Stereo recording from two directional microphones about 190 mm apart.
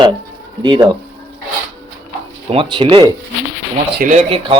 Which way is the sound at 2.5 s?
25° right (ahead or behind).